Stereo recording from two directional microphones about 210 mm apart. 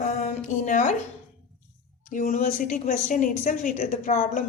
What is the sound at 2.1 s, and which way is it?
Speech, 35° left (ahead or behind).